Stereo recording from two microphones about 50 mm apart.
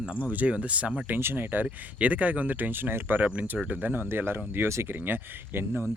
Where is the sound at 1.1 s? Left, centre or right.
Right.